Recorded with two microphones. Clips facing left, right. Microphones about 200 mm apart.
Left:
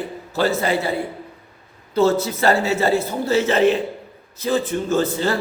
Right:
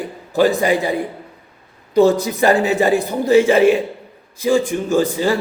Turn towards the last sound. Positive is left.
turn(degrees=-15)  # may be behind; listen again after turning